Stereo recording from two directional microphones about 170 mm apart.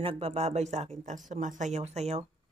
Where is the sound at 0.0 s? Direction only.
35° right (ahead or behind).